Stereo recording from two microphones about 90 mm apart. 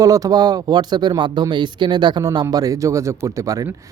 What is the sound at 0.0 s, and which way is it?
Speech, 40° right (ahead or behind).